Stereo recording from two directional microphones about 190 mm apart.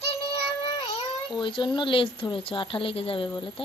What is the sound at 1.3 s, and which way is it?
A woman's voice, 25° left (ahead or behind).